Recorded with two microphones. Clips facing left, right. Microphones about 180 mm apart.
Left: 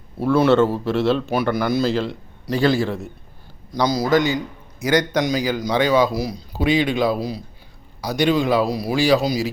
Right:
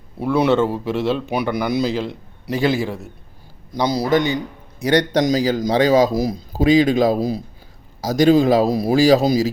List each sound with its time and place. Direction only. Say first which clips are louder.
0.2 s a man's voice: left 1 dB; 15° right (ahead or behind)
3.8 s a man's voice: even; 30° right (ahead or behind)